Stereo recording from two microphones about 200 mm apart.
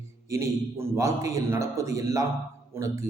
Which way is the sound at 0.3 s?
15° right (ahead or behind).